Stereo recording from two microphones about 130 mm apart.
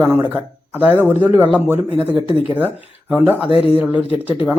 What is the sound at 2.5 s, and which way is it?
Speech, 10° right (ahead or behind).